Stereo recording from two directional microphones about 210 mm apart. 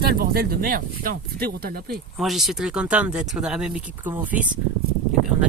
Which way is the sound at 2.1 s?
Centre (ahead or behind).